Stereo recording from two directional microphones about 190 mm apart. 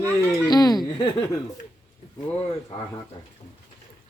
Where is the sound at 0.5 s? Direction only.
20° left (ahead or behind).